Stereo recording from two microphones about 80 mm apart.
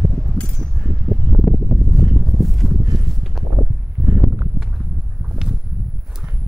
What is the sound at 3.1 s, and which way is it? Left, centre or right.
Clip-clop, centre.